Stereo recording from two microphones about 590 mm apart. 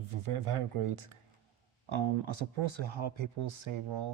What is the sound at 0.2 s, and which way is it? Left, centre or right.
Speech, right.